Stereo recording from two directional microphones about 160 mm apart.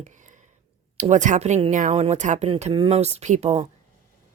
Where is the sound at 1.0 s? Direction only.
50° right (ahead or behind).